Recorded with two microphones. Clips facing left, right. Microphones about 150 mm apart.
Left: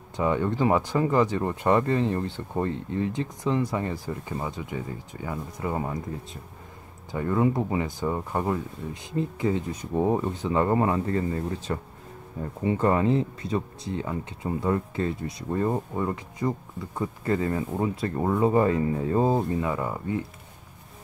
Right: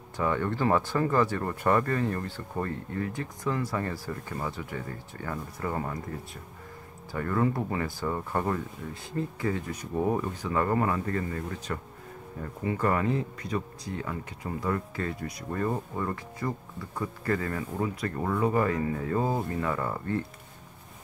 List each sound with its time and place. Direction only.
0.2 s speech: 15° left (ahead or behind)
7.1 s speech: 15° left (ahead or behind)